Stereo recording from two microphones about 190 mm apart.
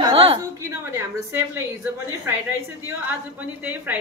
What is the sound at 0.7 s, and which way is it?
Speech, 15° right (ahead or behind).